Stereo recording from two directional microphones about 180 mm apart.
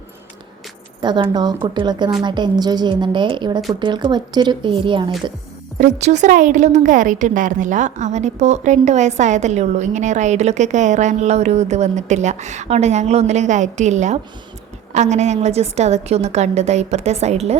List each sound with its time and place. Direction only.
1.0 s speech: 25° right (ahead or behind)
5.7 s a woman's voice: 40° right (ahead or behind)